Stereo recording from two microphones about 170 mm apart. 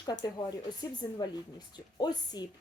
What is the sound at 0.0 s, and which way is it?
A woman's voice, 25° left (ahead or behind).